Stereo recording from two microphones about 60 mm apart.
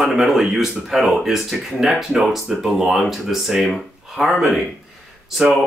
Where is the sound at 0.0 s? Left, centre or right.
Centre.